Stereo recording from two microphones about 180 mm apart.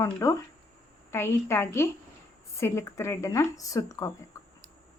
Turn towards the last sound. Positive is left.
turn(degrees=20)  # may be behind; listen again after turning